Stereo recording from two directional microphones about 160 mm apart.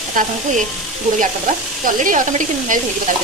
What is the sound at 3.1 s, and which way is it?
Speech, 55° right (ahead or behind).